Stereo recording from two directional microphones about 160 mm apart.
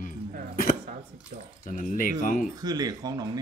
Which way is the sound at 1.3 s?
60° right (ahead or behind).